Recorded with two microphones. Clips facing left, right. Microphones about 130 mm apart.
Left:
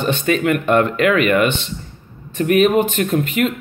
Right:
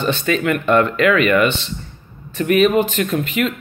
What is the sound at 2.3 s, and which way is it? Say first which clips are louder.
Speech: even; 45° left (ahead or behind).